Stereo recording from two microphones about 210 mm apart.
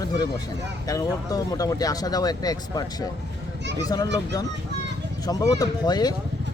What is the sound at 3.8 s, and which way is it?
Speech, 15° left (ahead or behind).